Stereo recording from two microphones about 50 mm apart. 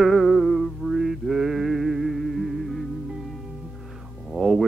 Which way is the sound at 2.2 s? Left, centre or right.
Centre.